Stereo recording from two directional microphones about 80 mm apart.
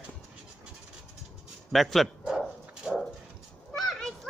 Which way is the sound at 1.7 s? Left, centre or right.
Centre.